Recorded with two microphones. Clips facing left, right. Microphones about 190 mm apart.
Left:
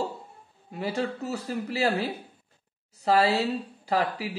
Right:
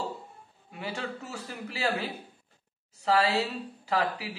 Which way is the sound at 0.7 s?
40° left (ahead or behind).